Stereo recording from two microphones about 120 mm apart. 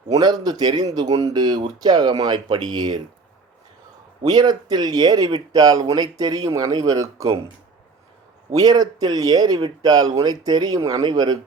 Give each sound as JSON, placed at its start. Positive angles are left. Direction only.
{"t": 0.1, "sound": "speech", "side_deg": -35}
{"t": 4.2, "sound": "speech", "side_deg": -35}
{"t": 8.5, "sound": "speech", "side_deg": -30}